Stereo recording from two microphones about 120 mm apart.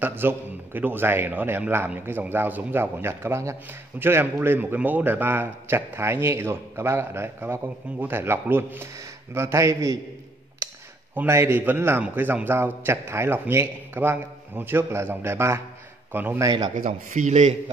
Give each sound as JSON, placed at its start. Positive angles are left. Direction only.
{"t": 0.0, "sound": "a man's voice", "side_deg": -15}
{"t": 11.1, "sound": "a man's voice", "side_deg": -20}
{"t": 16.4, "sound": "speech", "side_deg": -35}
{"t": 16.7, "sound": "a man's voice", "side_deg": -90}